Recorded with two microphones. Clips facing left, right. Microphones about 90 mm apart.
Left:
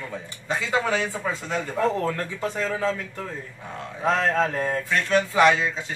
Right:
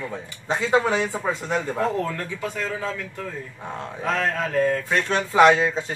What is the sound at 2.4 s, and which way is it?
Speech, 30° left (ahead or behind).